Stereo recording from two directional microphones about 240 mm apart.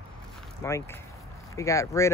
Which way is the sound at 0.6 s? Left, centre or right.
Centre.